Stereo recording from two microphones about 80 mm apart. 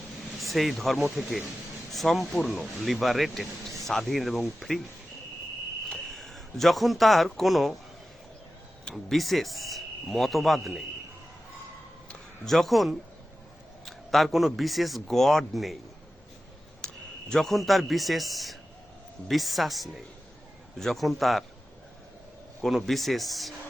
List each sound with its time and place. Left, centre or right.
0.3 s speech: centre
5.9 s speech: centre
8.8 s speech: centre
12.5 s speech: centre
16.8 s a man's voice: centre
22.6 s speech: centre